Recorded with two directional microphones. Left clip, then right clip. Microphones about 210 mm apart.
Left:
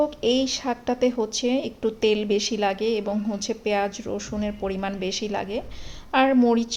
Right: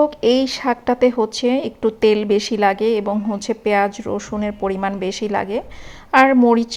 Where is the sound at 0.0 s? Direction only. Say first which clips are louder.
Right 7 dB; 20° right (ahead or behind).